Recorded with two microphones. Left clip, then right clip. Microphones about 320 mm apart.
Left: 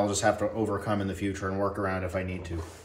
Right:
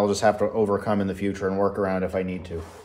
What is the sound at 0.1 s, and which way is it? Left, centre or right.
Speech, right.